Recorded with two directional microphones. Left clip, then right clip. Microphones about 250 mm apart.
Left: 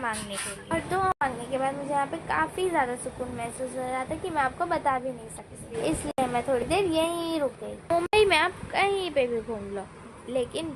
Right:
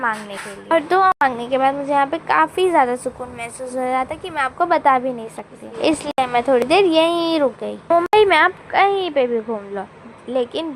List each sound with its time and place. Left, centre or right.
0.7 s a woman's voice: right
7.9 s a woman's voice: centre